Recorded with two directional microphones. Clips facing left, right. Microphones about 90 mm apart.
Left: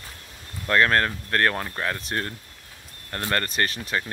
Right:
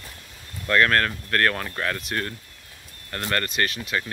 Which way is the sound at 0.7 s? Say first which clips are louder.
Even; 25° left (ahead or behind).